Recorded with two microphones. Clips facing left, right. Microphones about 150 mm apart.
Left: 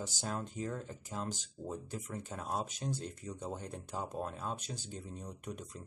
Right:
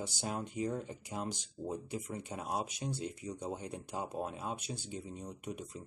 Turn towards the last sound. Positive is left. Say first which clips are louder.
# right 2 dB
turn(degrees=-10)  # may be behind; listen again after turning